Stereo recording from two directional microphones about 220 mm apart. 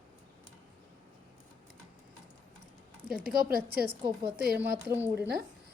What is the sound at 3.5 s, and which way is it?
Speech, 45° right (ahead or behind).